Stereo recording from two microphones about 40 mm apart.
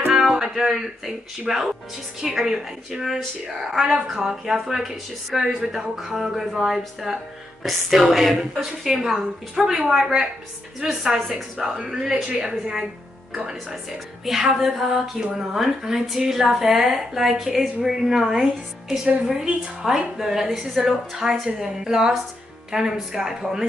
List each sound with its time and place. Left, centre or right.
0.1 s a woman's voice: centre
7.1 s a woman's voice: right
7.6 s a woman's voice: centre
11.1 s speech: centre
11.5 s a woman's voice: centre
14.6 s a woman's voice: centre